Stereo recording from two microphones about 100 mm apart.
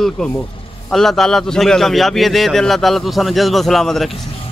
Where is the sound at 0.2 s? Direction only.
5° left (ahead or behind).